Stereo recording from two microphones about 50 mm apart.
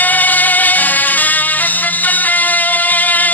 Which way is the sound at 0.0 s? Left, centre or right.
Left.